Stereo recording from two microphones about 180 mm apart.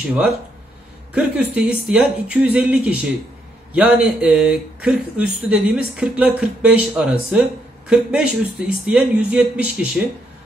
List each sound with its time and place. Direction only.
1.1 s a man's voice: 5° right (ahead or behind)